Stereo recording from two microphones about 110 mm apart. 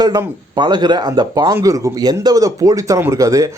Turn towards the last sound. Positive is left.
turn(degrees=-30)  # may be behind; listen again after turning